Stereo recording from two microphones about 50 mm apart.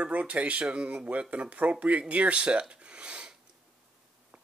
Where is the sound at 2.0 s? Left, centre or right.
Right.